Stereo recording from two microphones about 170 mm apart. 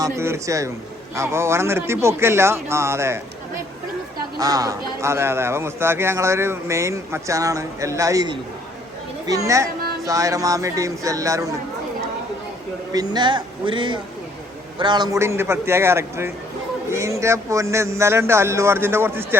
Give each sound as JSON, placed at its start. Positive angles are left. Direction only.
{"t": 0.0, "sound": "a man's voice", "side_deg": -15}
{"t": 4.4, "sound": "a man's voice", "side_deg": -20}
{"t": 12.9, "sound": "a man's voice", "side_deg": -25}